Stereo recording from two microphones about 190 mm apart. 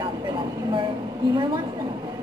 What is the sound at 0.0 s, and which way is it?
Vehicle, 20° right (ahead or behind).